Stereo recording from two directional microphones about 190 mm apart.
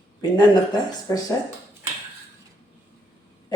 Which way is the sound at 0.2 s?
20° left (ahead or behind).